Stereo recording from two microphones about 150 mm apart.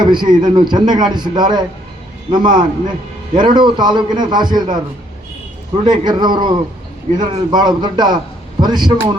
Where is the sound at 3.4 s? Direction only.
30° right (ahead or behind).